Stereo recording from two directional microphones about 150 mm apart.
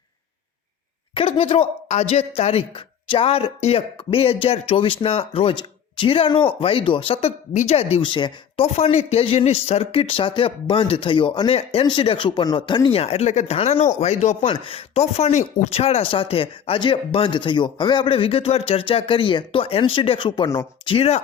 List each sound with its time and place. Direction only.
1.1 s speech: 40° left (ahead or behind)
14.5 s speech: 35° left (ahead or behind)
20.8 s speech: 40° left (ahead or behind)